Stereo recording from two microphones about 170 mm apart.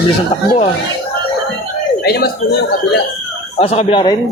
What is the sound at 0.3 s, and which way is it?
Speech, 35° left (ahead or behind).